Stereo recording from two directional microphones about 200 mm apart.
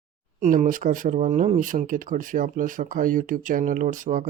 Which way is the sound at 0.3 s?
40° right (ahead or behind).